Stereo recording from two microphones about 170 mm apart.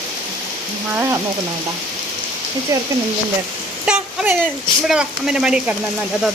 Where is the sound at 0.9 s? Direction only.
15° right (ahead or behind).